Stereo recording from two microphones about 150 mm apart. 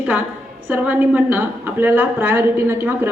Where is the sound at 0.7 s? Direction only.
10° right (ahead or behind).